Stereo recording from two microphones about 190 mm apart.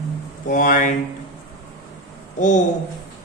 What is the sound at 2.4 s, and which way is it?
Mantra, 40° left (ahead or behind).